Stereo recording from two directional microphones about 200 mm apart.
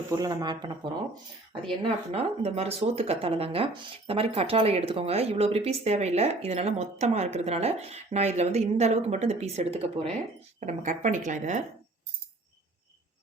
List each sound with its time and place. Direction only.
0.1 s speech: 20° right (ahead or behind)
1.8 s speech: 30° right (ahead or behind)